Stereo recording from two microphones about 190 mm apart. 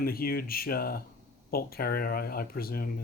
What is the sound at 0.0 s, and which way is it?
Speech, 50° left (ahead or behind).